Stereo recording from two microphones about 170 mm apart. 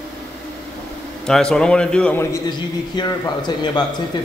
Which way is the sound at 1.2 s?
5° left (ahead or behind).